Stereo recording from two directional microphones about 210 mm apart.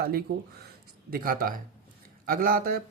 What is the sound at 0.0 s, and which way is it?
Speech, 45° right (ahead or behind).